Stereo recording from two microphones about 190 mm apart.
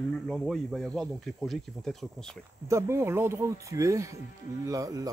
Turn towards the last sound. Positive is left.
turn(degrees=-20)  # may be behind; listen again after turning